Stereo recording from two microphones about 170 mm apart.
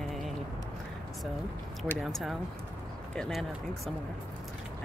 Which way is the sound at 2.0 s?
Centre (ahead or behind).